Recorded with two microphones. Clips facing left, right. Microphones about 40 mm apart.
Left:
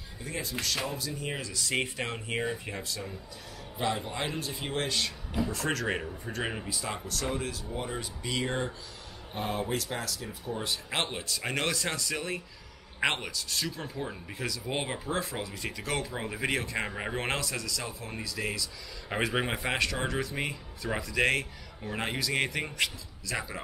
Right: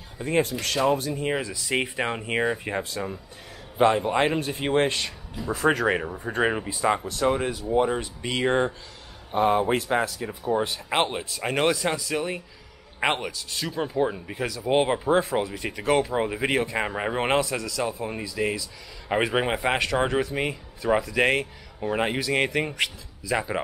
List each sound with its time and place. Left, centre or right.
0.2 s a man's voice: right
5.5 s speech: centre
11.0 s speech: centre